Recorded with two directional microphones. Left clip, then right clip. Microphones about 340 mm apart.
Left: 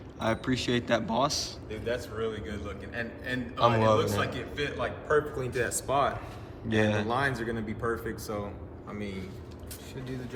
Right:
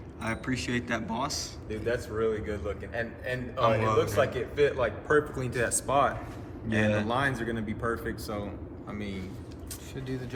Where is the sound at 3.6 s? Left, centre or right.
Centre.